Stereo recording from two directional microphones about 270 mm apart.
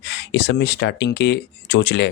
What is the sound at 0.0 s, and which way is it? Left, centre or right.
Speech, left.